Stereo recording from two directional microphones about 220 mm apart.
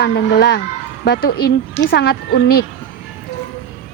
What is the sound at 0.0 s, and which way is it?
A woman's voice, 50° left (ahead or behind).